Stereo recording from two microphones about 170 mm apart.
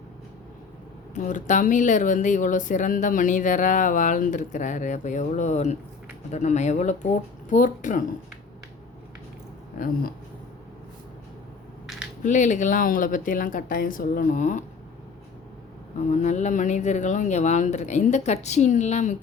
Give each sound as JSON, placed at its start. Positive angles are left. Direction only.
{"t": 1.1, "sound": "speech", "side_deg": 50}
{"t": 9.7, "sound": "speech", "side_deg": 55}
{"t": 12.2, "sound": "speech", "side_deg": 50}
{"t": 16.0, "sound": "speech", "side_deg": 45}